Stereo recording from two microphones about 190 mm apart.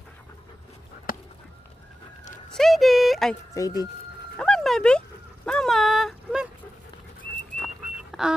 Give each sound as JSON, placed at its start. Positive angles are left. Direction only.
{"t": 2.5, "sound": "speech", "side_deg": 0}
{"t": 3.5, "sound": "speech", "side_deg": 20}
{"t": 4.4, "sound": "dog", "side_deg": 5}
{"t": 7.6, "sound": "a sound", "side_deg": 0}